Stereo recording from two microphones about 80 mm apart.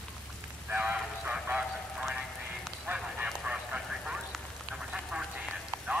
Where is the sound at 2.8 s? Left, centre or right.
Centre.